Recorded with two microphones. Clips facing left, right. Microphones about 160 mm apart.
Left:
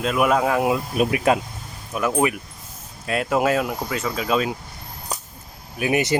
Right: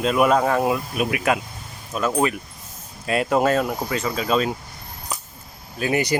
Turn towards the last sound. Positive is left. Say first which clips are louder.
# left 1 dB
turn(degrees=20)  # may be behind; listen again after turning